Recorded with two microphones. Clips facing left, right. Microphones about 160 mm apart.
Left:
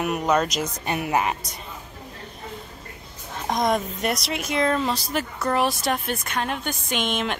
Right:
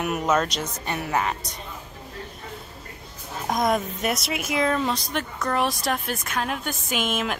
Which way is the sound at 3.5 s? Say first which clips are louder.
Even; centre (ahead or behind).